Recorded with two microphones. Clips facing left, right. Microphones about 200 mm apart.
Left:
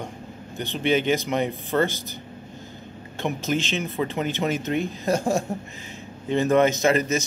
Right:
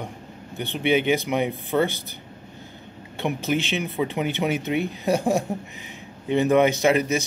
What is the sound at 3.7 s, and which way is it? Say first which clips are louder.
Speech: right 1 dB; 15° right (ahead or behind).